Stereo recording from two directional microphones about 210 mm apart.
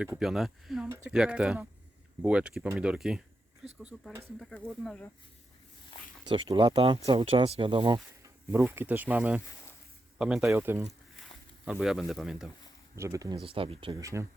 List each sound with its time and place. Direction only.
0.0 s speech: 5° right (ahead or behind)
5.9 s a sound: 25° left (ahead or behind)
6.2 s speech: 25° right (ahead or behind)
8.5 s speech: 10° right (ahead or behind)
13.0 s speech: 15° right (ahead or behind)
14.0 s speech: 15° right (ahead or behind)